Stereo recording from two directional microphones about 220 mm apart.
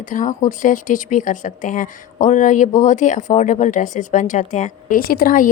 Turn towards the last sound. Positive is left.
turn(degrees=40)  # may be behind; listen again after turning